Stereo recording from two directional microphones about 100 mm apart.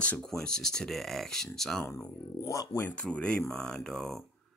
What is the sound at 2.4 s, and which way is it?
Speech, 30° left (ahead or behind).